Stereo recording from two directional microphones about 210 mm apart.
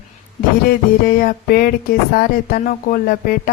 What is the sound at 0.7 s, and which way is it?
Speech, 45° left (ahead or behind).